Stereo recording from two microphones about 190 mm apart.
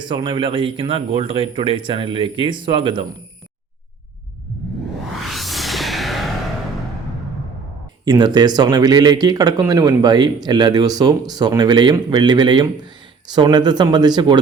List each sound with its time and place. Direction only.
0.0 s speech: 25° right (ahead or behind)
5.2 s music: centre (ahead or behind)
8.0 s speech: 20° right (ahead or behind)